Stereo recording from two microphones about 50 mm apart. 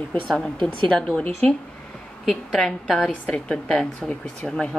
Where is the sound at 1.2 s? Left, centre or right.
Left.